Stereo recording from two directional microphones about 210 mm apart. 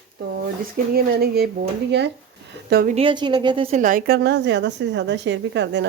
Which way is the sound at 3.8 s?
40° right (ahead or behind).